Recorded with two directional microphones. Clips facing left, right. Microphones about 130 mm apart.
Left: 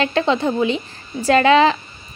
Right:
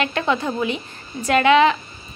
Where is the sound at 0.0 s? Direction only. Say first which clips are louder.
Left 4 dB; 30° left (ahead or behind).